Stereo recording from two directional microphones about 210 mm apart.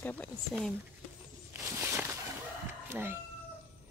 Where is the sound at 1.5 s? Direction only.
10° right (ahead or behind).